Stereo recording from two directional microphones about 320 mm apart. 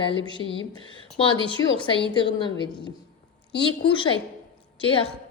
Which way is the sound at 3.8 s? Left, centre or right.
Centre.